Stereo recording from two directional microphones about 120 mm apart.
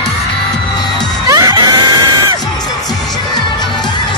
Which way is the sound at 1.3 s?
30° right (ahead or behind).